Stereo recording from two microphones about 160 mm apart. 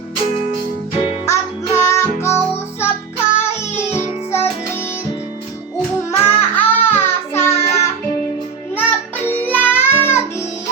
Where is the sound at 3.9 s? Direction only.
15° left (ahead or behind).